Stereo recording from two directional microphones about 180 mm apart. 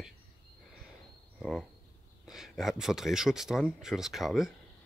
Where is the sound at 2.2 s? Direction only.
Centre (ahead or behind).